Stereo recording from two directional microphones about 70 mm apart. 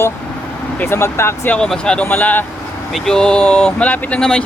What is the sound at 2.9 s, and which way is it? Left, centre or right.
Speech, centre.